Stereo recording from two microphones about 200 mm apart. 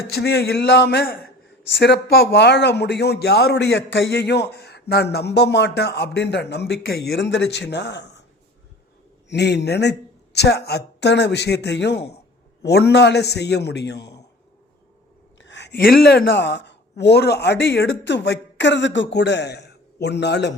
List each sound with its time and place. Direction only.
0.1 s speech: 55° left (ahead or behind)
9.3 s speech: 60° left (ahead or behind)
15.4 s a woman's voice: 65° left (ahead or behind)